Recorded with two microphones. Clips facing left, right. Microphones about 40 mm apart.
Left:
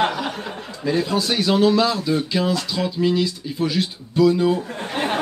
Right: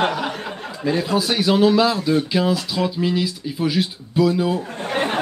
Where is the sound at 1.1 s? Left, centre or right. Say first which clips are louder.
Right 3 dB; centre.